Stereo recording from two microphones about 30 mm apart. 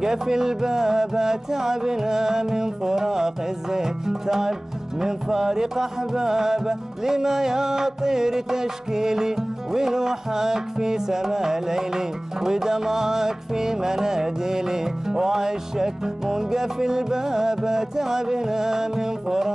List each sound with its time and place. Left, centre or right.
0.0 s music: centre